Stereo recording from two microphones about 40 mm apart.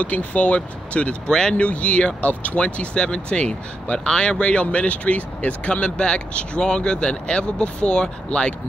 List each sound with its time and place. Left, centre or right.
0.0 s speech: left